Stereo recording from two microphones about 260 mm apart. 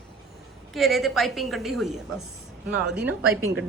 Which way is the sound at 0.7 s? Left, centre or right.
Centre.